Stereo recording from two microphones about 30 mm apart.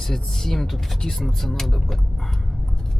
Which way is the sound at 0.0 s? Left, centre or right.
Centre.